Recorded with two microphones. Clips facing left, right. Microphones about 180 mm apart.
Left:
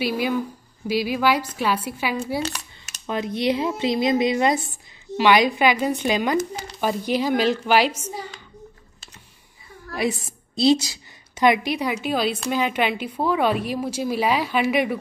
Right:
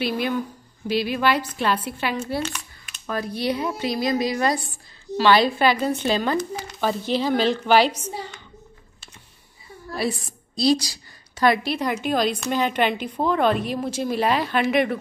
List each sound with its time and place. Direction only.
0.0 s a woman's voice: 10° left (ahead or behind)
2.4 s a sound: 40° left (ahead or behind)
3.1 s a woman's voice: 20° left (ahead or behind)
9.9 s a woman's voice: 20° left (ahead or behind)